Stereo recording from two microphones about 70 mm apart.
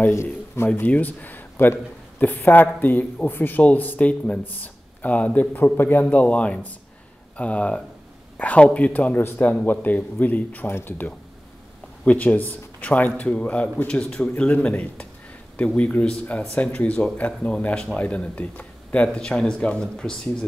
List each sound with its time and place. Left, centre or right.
0.1 s a man's voice: left
0.7 s speech: left
14.5 s speech: left
19.1 s speech: centre